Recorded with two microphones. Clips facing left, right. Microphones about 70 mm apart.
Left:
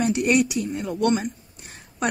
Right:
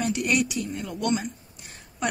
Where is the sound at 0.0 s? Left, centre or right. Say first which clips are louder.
Left 5 dB; left.